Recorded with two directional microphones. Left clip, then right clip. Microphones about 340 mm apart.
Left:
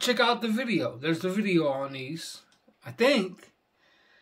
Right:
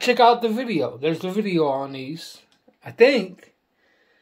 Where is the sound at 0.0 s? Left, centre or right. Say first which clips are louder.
Right 9 dB; centre.